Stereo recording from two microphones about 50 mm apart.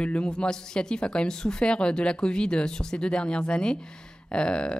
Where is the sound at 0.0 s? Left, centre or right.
Left.